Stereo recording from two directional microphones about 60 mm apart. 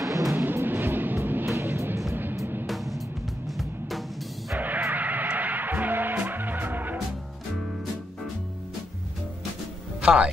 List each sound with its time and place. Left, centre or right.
0.0 s music: right
0.7 s vehicle: right
1.5 s music: right
2.6 s music: centre
4.6 s music: right
10.0 s speech: centre